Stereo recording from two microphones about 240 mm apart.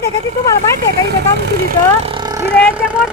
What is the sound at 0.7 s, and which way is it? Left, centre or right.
Speech, right.